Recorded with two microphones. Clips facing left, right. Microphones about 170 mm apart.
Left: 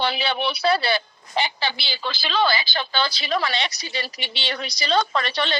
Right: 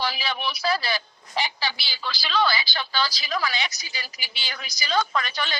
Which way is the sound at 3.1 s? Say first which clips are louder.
Left 4 dB; 65° left (ahead or behind).